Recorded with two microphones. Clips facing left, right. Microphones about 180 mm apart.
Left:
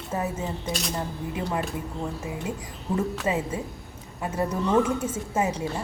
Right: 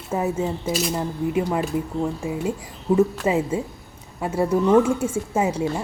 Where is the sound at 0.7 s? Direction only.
Centre (ahead or behind).